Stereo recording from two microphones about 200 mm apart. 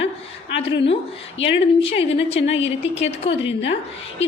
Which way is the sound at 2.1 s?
30° left (ahead or behind).